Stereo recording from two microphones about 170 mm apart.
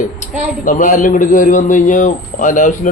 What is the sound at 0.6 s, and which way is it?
A man's voice, 50° left (ahead or behind).